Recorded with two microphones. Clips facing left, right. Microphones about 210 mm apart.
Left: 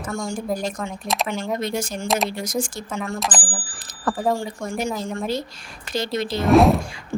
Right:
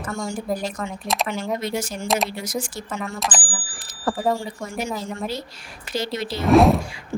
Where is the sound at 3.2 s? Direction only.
Centre (ahead or behind).